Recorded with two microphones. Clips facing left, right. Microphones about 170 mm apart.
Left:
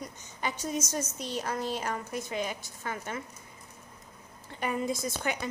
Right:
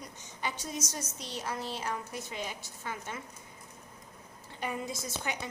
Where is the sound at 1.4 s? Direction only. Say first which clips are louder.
Left 2 dB; 50° left (ahead or behind).